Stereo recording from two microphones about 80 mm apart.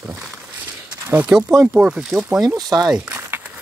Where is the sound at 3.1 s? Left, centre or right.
Right.